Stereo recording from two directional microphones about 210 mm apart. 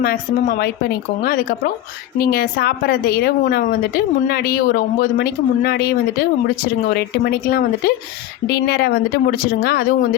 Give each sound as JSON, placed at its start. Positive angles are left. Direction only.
{"t": 0.0, "sound": "a woman's voice", "side_deg": 45}